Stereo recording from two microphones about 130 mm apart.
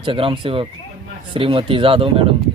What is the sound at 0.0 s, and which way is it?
Speech, 40° right (ahead or behind).